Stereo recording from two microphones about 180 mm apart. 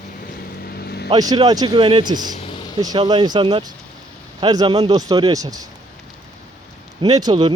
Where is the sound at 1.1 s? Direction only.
20° right (ahead or behind).